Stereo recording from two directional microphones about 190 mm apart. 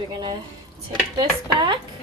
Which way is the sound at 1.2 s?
25° right (ahead or behind).